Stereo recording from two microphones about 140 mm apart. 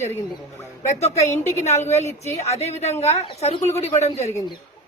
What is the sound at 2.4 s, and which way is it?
Speech, 50° left (ahead or behind).